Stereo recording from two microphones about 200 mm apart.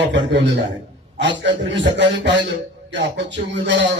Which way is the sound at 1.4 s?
60° right (ahead or behind).